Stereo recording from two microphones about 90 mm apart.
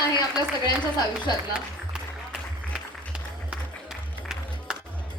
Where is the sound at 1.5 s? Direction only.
10° right (ahead or behind).